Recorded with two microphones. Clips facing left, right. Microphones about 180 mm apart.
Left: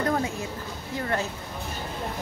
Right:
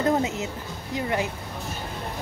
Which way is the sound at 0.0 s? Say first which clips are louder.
Right 3 dB; 20° right (ahead or behind).